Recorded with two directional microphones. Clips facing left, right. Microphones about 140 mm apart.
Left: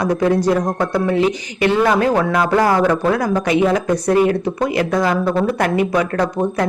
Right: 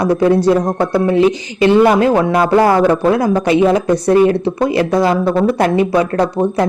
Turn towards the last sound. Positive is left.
turn(degrees=-30)  # may be behind; listen again after turning